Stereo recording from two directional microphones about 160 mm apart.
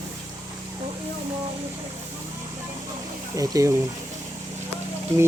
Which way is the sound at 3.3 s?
20° right (ahead or behind).